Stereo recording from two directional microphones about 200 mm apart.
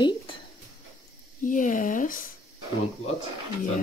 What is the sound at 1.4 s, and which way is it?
Speech, 40° left (ahead or behind).